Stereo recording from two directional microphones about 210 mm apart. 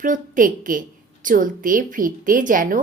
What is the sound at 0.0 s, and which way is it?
A woman's voice, 40° right (ahead or behind).